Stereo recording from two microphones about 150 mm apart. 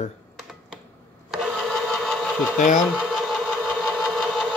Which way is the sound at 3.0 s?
Centre (ahead or behind).